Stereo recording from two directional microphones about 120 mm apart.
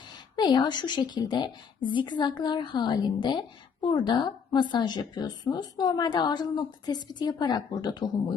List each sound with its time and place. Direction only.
0.3 s a woman's voice: 40° left (ahead or behind)